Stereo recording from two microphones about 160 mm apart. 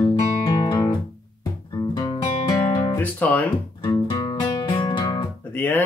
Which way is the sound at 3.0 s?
10° left (ahead or behind).